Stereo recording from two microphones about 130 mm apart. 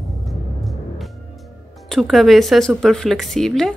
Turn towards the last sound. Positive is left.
turn(degrees=0)  # may be behind; listen again after turning